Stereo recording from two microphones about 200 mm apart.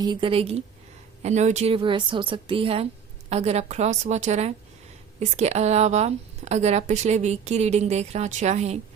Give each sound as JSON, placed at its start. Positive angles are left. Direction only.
{"t": 0.0, "sound": "a woman's voice", "side_deg": -25}